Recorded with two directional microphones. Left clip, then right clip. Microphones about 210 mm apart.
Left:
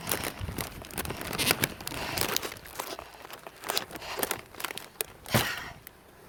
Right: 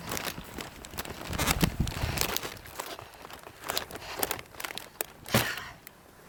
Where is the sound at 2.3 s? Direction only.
15° left (ahead or behind).